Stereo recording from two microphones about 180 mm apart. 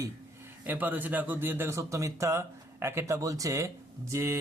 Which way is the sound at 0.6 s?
10° right (ahead or behind).